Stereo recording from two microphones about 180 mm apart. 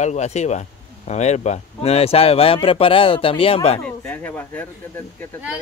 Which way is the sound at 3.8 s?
10° left (ahead or behind).